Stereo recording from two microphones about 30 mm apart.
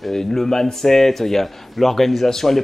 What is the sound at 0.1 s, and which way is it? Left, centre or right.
Speech, centre.